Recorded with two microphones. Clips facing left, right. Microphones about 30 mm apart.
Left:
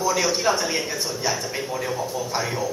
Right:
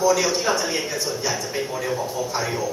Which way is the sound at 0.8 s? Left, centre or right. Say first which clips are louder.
Right 1 dB; left.